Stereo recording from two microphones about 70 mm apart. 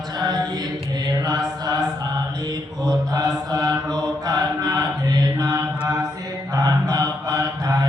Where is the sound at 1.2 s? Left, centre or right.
Right.